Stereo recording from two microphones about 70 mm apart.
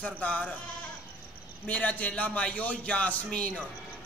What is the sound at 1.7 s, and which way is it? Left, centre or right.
A man's voice, left.